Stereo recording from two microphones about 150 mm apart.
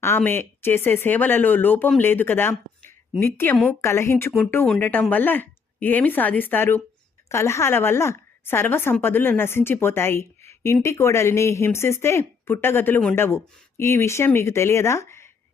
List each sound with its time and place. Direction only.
0.0 s speech: 15° left (ahead or behind)
4.6 s speech: 5° left (ahead or behind)